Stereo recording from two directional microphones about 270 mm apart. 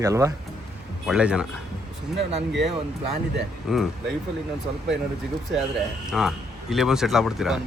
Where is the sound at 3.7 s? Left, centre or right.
Centre.